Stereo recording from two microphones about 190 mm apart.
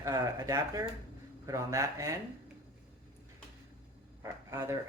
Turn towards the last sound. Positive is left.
turn(degrees=-15)  # may be behind; listen again after turning